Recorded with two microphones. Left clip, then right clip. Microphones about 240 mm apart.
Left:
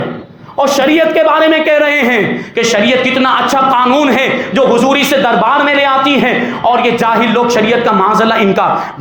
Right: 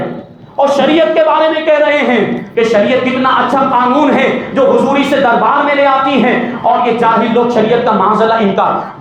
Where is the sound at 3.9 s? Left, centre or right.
Left.